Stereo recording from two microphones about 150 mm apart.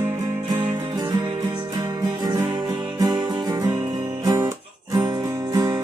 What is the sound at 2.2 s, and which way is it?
Music, 25° right (ahead or behind).